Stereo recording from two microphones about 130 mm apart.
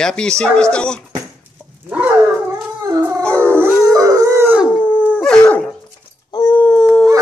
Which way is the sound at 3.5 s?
20° right (ahead or behind).